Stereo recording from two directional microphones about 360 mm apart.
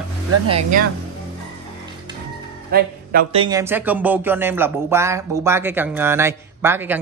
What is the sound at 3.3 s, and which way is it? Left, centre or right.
Speech, centre.